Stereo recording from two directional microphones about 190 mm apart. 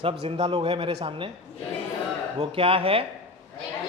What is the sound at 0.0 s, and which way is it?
Speech, 30° right (ahead or behind).